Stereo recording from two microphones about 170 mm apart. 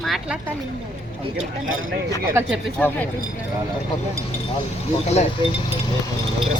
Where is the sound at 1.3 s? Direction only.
55° right (ahead or behind).